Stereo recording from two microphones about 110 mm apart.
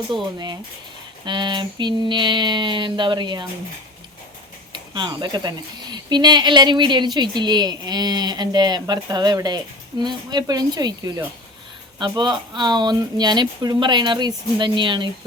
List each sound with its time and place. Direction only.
0.1 s speech: 45° right (ahead or behind)
4.7 s speech: 45° right (ahead or behind)